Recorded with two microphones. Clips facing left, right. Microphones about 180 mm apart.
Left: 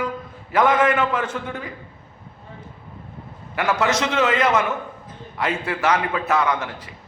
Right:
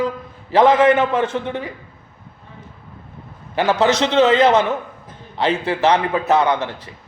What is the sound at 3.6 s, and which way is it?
A man's voice, 35° right (ahead or behind).